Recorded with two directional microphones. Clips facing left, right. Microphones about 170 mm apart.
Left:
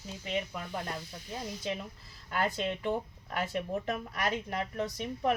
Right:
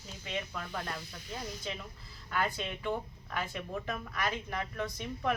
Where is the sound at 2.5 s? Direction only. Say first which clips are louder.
Left 3 dB; 35° left (ahead or behind).